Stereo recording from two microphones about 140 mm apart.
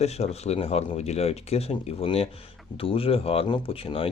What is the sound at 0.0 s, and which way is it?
Speech, 50° left (ahead or behind).